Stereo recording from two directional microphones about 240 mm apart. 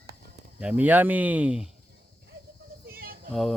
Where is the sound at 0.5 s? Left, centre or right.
Centre.